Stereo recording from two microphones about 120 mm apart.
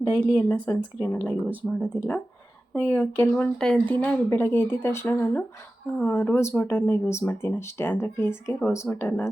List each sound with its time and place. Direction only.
0.1 s speech: 10° left (ahead or behind)